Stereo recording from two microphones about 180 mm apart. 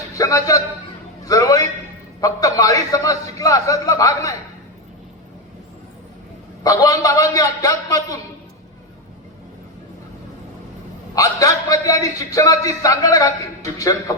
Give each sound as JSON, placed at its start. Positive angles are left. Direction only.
{"t": 0.2, "sound": "a man's voice", "side_deg": 20}
{"t": 6.6, "sound": "a man's voice", "side_deg": 20}
{"t": 11.1, "sound": "a man's voice", "side_deg": 20}